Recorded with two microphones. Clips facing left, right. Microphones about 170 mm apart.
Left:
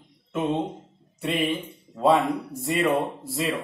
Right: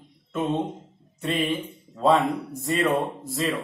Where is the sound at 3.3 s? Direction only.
10° left (ahead or behind).